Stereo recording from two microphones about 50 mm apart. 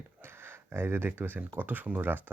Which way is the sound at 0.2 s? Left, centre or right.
Right.